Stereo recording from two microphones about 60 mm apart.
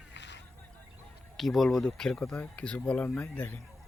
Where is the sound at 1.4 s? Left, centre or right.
Centre.